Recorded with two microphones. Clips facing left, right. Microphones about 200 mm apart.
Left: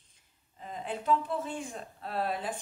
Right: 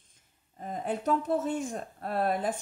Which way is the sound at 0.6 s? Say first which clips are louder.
Right 5 dB; 45° right (ahead or behind).